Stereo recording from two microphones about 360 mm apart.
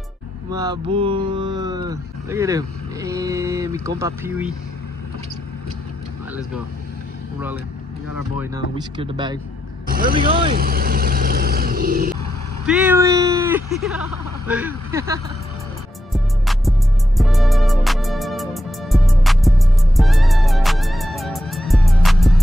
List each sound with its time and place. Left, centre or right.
0.5 s speech: centre
8.4 s speech: centre
9.8 s vehicle: right
12.6 s speech: centre
16.1 s music: centre